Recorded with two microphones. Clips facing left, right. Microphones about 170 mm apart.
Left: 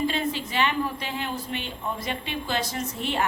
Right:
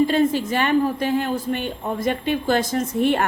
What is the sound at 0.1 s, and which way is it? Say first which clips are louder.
A woman's voice: right 9 dB; 45° right (ahead or behind).